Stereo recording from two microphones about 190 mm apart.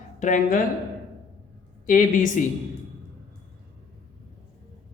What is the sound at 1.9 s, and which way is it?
Speech, 45° left (ahead or behind).